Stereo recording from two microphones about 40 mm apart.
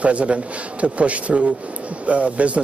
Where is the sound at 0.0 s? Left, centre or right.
Right.